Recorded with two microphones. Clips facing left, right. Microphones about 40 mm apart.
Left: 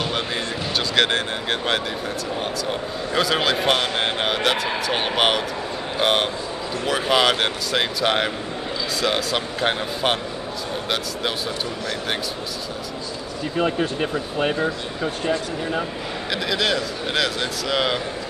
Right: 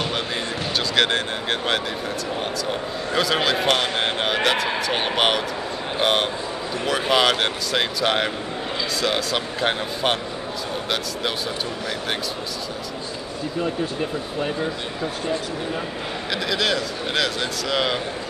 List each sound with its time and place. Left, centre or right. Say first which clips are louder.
0.7 s speech: left 1 dB; centre
13.6 s speech: left 4 dB; left
15.2 s speech: left 3 dB; left
16.3 s speech: left 1 dB; centre